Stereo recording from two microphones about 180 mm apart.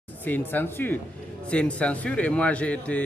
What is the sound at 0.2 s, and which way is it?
A man's voice, 10° left (ahead or behind).